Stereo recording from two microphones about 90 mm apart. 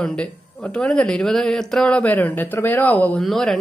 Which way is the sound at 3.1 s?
5° left (ahead or behind).